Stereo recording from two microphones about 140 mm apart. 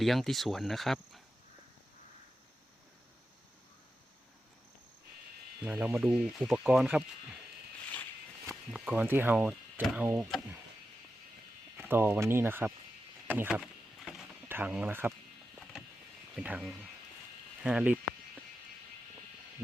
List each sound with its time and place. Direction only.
0.0 s speech: centre (ahead or behind)
5.6 s speech: 10° right (ahead or behind)
8.7 s speech: 10° right (ahead or behind)
11.8 s speech: 15° right (ahead or behind)
13.6 s a sound: centre (ahead or behind)
14.4 s speech: 15° right (ahead or behind)
16.3 s speech: 5° right (ahead or behind)